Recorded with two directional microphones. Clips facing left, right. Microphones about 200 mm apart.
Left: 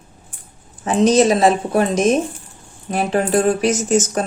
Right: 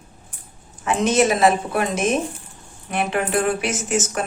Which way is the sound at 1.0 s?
35° left (ahead or behind).